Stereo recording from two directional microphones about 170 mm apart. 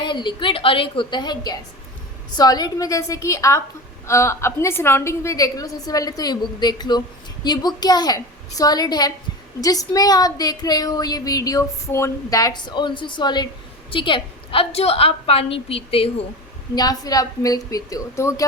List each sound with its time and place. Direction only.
0.0 s a woman's voice: 30° left (ahead or behind)
16.7 s a woman's voice: 20° left (ahead or behind)